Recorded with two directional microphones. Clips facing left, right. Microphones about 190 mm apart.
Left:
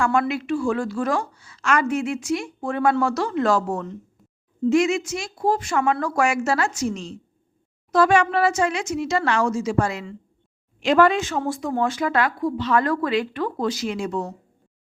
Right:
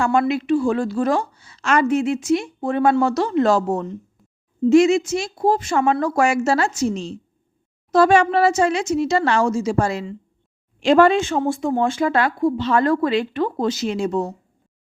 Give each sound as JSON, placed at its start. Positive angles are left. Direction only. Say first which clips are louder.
{"t": 0.0, "sound": "speech", "louder": "right 3 dB", "side_deg": -25}